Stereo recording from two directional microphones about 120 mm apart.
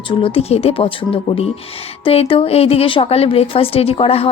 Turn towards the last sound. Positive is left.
turn(degrees=55)  # may be behind; listen again after turning